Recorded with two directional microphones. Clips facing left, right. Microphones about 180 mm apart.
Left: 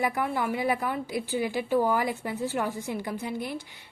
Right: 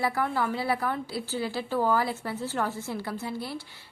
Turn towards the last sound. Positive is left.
turn(degrees=15)  # may be behind; listen again after turning